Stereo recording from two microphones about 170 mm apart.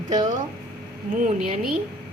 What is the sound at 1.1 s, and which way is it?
Speech, 50° right (ahead or behind).